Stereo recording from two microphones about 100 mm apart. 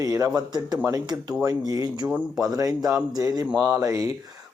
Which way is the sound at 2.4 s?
35° right (ahead or behind).